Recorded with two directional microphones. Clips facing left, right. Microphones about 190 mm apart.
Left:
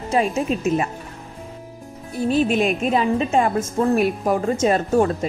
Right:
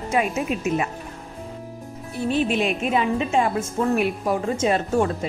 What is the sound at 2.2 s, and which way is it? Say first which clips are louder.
Speech: left 3 dB; 40° left (ahead or behind).